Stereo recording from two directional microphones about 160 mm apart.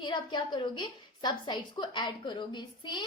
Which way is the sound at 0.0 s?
30° left (ahead or behind).